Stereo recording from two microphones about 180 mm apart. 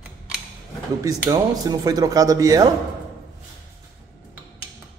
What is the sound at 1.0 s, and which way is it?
Speech, 20° right (ahead or behind).